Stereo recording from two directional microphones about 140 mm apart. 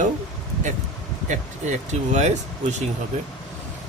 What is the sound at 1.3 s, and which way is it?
Speech, 55° right (ahead or behind).